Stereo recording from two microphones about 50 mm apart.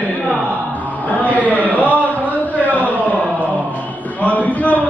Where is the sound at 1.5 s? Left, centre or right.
Left.